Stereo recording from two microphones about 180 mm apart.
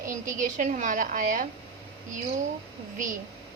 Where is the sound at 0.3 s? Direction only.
45° right (ahead or behind).